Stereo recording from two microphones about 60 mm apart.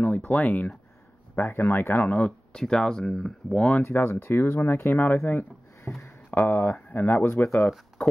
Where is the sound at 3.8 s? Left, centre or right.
Left.